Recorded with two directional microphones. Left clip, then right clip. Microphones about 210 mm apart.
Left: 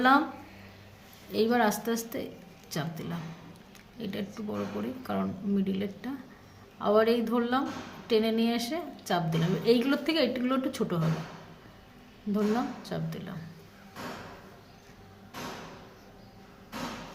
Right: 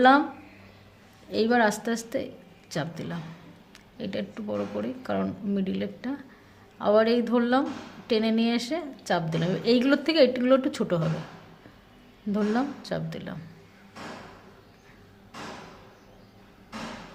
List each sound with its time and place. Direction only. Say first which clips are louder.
1.3 s a woman's voice: right 3 dB; 35° right (ahead or behind)
12.3 s a woman's voice: right 2 dB; 40° right (ahead or behind)